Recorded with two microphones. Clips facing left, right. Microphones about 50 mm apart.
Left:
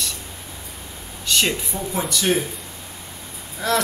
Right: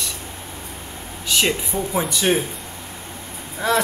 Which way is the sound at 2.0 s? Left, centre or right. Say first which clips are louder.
Right 1 dB; centre.